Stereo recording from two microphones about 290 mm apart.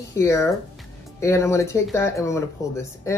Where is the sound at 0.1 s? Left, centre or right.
Centre.